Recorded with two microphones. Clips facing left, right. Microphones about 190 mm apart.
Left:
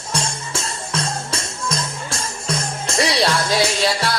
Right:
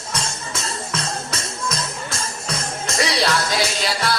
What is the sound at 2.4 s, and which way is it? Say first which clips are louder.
Music: left 3 dB; 30° left (ahead or behind).